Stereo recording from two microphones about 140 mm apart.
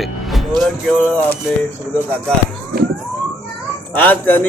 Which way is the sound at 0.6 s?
5° left (ahead or behind).